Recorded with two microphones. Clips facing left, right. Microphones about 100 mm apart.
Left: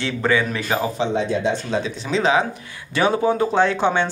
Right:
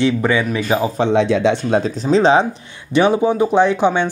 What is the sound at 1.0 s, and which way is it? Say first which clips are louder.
Speech: right 6 dB; 80° right.